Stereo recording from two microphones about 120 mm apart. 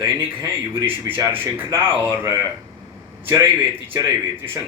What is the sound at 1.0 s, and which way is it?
Speech, 15° right (ahead or behind).